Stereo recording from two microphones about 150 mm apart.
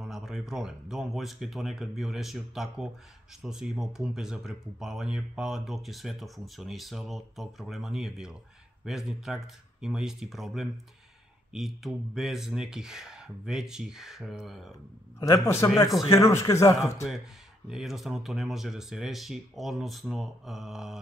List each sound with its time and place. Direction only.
0.0 s speech: 5° right (ahead or behind)
15.1 s speech: 25° left (ahead or behind)
17.6 s speech: centre (ahead or behind)